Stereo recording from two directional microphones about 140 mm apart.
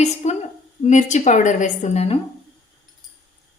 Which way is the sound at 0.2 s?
55° left (ahead or behind).